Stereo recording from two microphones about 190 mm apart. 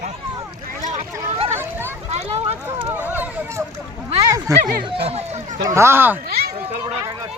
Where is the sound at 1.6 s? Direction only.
10° right (ahead or behind).